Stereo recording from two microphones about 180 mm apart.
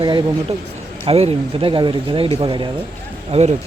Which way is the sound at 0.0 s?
25° right (ahead or behind).